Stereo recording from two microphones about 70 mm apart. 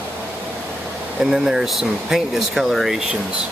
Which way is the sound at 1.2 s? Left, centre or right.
Centre.